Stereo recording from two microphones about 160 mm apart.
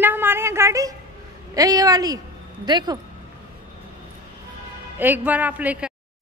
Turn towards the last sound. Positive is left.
turn(degrees=-10)  # may be behind; listen again after turning